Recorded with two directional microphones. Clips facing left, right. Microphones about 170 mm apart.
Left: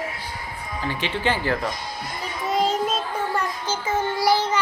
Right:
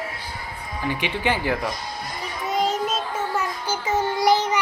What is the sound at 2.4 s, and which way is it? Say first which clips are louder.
Child singing: left 1 dB; centre (ahead or behind).